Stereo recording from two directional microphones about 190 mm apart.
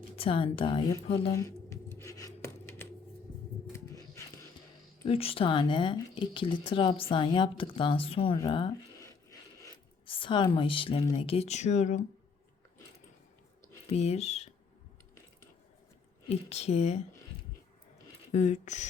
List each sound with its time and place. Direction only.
0.2 s speech: 30° left (ahead or behind)
1.3 s a sound: 15° left (ahead or behind)
5.0 s speech: 30° left (ahead or behind)
9.0 s filing: 15° left (ahead or behind)
10.1 s a woman's voice: 25° left (ahead or behind)
13.8 s speech: 35° left (ahead or behind)
16.3 s speech: 35° left (ahead or behind)
18.3 s speech: 40° left (ahead or behind)